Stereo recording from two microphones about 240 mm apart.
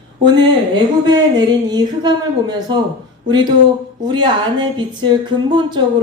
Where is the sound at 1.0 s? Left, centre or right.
Centre.